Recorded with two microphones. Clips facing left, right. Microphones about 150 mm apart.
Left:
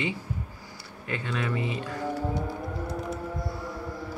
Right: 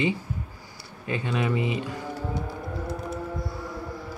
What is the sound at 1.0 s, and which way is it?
Speech, 20° right (ahead or behind).